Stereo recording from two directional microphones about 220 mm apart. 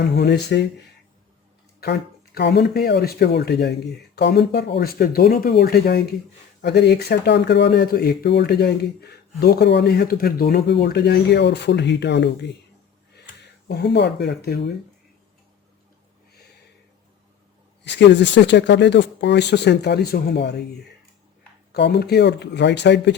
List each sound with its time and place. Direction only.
0.0 s speech: 50° left (ahead or behind)
1.8 s speech: 50° left (ahead or behind)
13.7 s speech: 50° left (ahead or behind)
17.8 s speech: 50° left (ahead or behind)
21.7 s speech: 50° left (ahead or behind)